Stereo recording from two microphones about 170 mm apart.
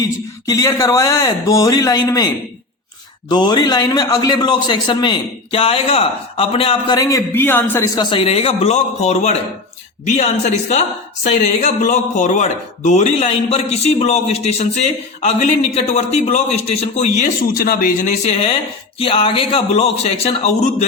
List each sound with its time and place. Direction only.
0.4 s a man's voice: 20° left (ahead or behind)
7.9 s speech: 35° left (ahead or behind)
17.5 s speech: 60° left (ahead or behind); by 20.8 s 40° left (ahead or behind)